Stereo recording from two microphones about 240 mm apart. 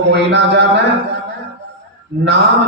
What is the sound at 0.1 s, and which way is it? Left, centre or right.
Speech, right.